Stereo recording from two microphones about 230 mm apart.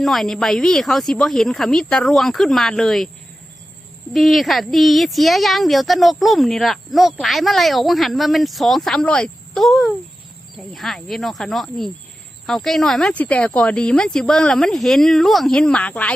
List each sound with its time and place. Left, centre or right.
0.0 s a woman's voice: centre
4.1 s a woman's voice: centre